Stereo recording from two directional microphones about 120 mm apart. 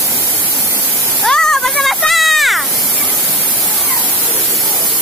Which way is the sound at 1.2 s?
5° left (ahead or behind).